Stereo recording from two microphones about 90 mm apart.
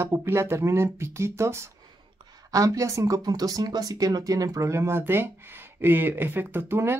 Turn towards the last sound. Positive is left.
turn(degrees=-25)  # may be behind; listen again after turning